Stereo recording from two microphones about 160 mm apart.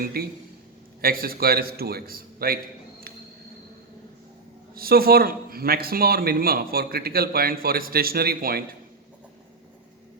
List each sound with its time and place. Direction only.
0.0 s speech: 70° right (ahead or behind)
4.7 s speech: 70° right (ahead or behind)